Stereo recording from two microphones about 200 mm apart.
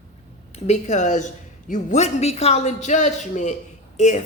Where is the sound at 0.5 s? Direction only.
35° left (ahead or behind).